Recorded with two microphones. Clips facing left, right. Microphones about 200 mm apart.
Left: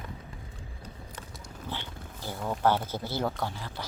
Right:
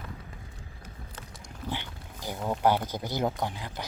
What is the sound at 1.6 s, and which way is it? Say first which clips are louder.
Wild animals: right 3 dB; 15° right (ahead or behind).